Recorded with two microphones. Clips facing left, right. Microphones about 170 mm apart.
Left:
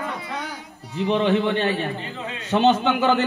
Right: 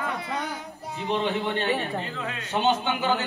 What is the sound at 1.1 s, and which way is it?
A man's voice, 70° left (ahead or behind).